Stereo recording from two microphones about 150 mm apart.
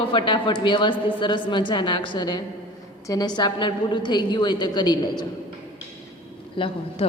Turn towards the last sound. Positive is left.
turn(degrees=35)  # may be behind; listen again after turning